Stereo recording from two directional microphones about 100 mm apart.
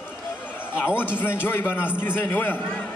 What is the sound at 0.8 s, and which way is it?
A man's voice, 20° left (ahead or behind).